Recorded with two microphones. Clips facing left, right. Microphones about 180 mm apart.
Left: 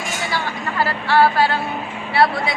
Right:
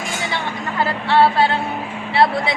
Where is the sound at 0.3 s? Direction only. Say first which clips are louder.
Even; 20° right (ahead or behind).